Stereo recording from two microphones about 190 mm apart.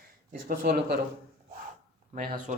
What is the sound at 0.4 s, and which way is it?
Speech, 55° right (ahead or behind).